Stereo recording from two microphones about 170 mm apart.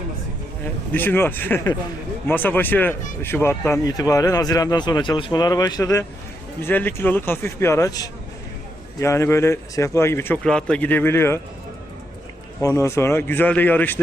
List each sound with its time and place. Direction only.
0.9 s a man's voice: 10° left (ahead or behind)
10.4 s a man's voice: 5° left (ahead or behind)
12.6 s a man's voice: 15° left (ahead or behind)